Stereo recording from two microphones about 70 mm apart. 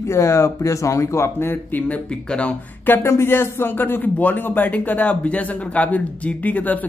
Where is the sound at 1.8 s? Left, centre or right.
Centre.